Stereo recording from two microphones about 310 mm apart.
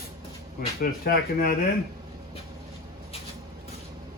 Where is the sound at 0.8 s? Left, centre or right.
Left.